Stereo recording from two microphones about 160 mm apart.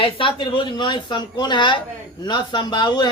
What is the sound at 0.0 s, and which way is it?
A woman's voice, 30° left (ahead or behind).